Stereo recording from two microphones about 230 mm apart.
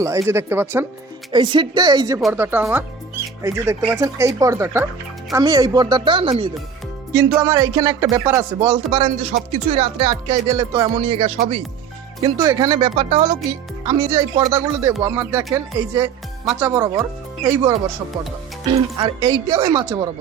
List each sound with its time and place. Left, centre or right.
0.0 s speech: centre
1.3 s speech: centre
16.5 s speech: centre
18.9 s speech: centre